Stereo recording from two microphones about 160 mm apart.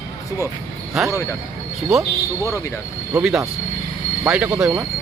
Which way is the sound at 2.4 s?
20° left (ahead or behind).